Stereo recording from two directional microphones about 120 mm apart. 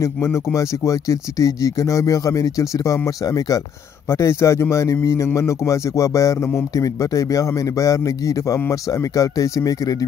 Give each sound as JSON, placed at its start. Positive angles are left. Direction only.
{"t": 0.0, "sound": "speech", "side_deg": 25}